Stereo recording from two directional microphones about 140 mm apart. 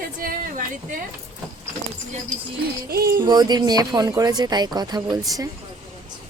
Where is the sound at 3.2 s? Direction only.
30° right (ahead or behind).